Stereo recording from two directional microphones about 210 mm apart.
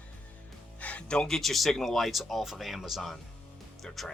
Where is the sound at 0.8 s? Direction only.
5° left (ahead or behind).